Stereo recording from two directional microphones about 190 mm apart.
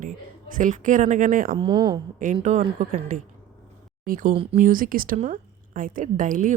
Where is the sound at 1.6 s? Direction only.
25° right (ahead or behind).